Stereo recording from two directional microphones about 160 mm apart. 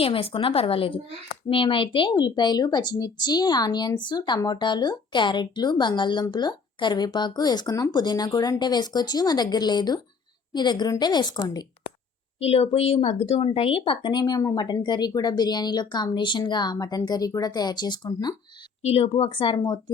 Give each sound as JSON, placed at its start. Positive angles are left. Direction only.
{"t": 0.0, "sound": "a woman's voice", "side_deg": 35}
{"t": 12.4, "sound": "a woman's voice", "side_deg": 35}
{"t": 18.8, "sound": "speech", "side_deg": 40}